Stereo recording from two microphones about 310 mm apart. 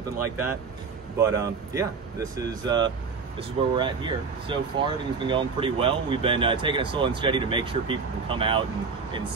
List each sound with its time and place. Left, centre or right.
0.2 s speech: centre